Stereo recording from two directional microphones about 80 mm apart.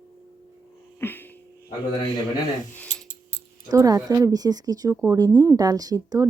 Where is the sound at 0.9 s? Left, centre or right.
Left.